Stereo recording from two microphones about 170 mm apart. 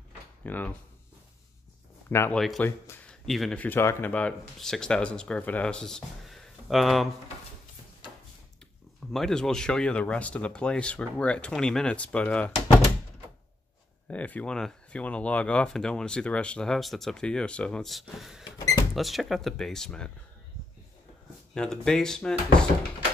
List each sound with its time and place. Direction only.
0.4 s speech: 10° left (ahead or behind)
2.0 s speech: 15° left (ahead or behind)
9.1 s speech: 5° left (ahead or behind)
14.0 s speech: 10° left (ahead or behind)
18.4 s a sound: 25° left (ahead or behind)
18.9 s speech: centre (ahead or behind)
21.5 s speech: 5° left (ahead or behind)